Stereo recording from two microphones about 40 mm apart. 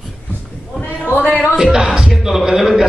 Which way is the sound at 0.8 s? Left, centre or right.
Left.